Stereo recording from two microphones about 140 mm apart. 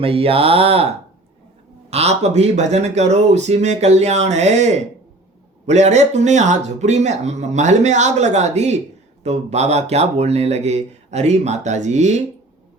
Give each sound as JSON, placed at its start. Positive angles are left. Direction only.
{"t": 0.0, "sound": "speech", "side_deg": -40}
{"t": 1.9, "sound": "speech", "side_deg": -50}